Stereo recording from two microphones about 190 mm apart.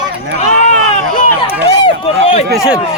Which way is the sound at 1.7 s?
30° left (ahead or behind).